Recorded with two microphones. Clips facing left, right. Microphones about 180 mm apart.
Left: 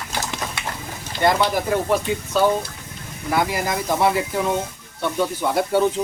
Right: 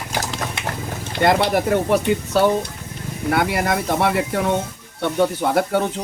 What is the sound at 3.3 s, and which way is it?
Speech, 60° right (ahead or behind).